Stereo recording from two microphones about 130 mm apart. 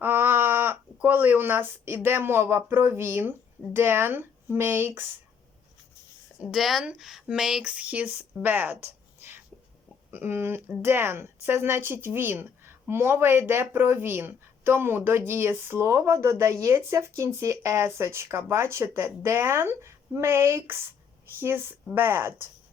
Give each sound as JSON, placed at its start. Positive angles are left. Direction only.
{"t": 0.0, "sound": "speech", "side_deg": -15}
{"t": 6.4, "sound": "speech", "side_deg": 0}